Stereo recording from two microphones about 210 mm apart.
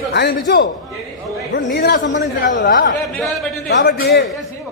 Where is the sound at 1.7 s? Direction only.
45° left (ahead or behind).